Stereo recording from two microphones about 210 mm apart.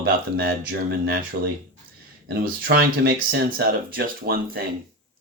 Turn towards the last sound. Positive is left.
turn(degrees=-45)  # may be behind; listen again after turning